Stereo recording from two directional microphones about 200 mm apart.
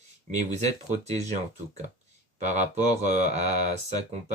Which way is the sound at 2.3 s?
35° right (ahead or behind).